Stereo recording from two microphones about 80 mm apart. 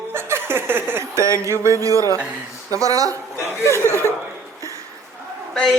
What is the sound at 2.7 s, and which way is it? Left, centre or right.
Speech, right.